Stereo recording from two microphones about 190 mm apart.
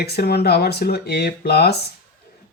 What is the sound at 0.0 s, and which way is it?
Speech, 55° left (ahead or behind).